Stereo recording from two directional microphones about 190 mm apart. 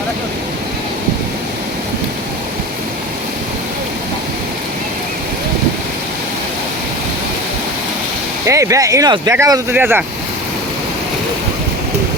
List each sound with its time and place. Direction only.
8.4 s speech: 15° right (ahead or behind)